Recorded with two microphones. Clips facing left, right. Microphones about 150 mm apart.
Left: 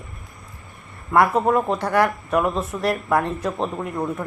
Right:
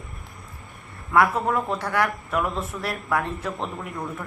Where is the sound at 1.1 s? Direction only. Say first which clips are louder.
Left 3 dB; 20° left (ahead or behind).